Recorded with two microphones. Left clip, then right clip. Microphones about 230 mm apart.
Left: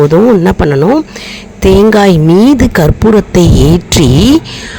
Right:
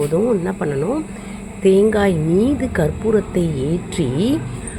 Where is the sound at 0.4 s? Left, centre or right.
Left.